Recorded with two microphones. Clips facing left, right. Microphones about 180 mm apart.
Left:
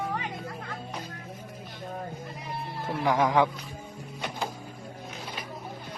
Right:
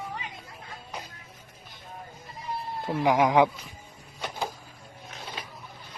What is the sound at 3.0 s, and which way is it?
Speech, 20° right (ahead or behind).